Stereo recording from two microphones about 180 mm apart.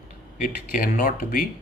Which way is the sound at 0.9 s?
55° left (ahead or behind).